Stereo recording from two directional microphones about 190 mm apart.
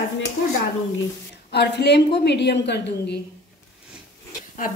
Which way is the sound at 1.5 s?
60° left (ahead or behind).